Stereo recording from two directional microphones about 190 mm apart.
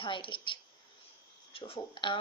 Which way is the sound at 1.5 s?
30° left (ahead or behind).